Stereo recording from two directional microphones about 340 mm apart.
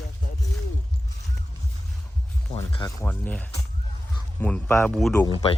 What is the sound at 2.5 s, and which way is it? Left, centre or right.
Speech, centre.